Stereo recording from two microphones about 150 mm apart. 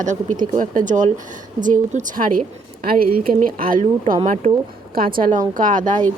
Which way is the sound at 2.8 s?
75° right (ahead or behind).